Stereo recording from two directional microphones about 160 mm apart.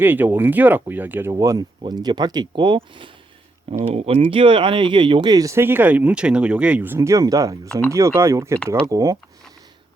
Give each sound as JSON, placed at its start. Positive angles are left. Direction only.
{"t": 0.0, "sound": "speech", "side_deg": -10}